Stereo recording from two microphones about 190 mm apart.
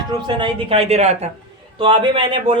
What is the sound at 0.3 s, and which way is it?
A woman's voice, 25° right (ahead or behind).